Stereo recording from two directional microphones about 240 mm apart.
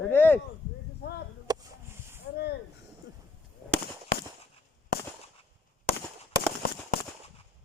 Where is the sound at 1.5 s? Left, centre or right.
Centre.